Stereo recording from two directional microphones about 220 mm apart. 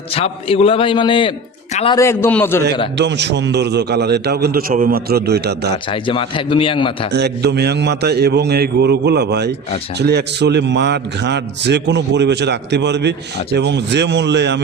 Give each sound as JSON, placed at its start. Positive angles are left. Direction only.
{"t": 0.1, "sound": "a man's voice", "side_deg": 25}
{"t": 2.0, "sound": "a man's voice", "side_deg": 10}
{"t": 3.0, "sound": "a man's voice", "side_deg": -50}
{"t": 5.9, "sound": "a man's voice", "side_deg": 25}
{"t": 7.1, "sound": "a man's voice", "side_deg": -50}